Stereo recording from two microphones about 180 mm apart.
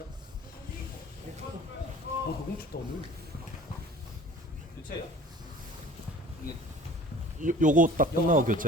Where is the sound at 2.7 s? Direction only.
60° left (ahead or behind).